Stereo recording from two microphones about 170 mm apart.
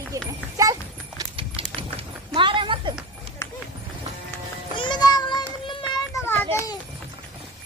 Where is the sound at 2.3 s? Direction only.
30° right (ahead or behind).